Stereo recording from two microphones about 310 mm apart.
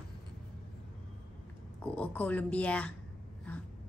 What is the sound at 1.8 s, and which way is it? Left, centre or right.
Speech, centre.